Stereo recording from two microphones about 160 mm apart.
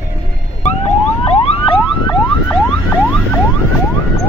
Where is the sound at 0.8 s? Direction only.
40° left (ahead or behind).